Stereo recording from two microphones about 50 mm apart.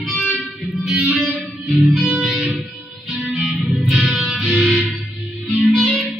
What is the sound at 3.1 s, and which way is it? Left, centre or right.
Music, centre.